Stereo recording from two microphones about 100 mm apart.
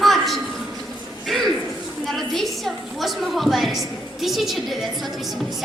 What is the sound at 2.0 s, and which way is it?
A woman's voice, centre (ahead or behind).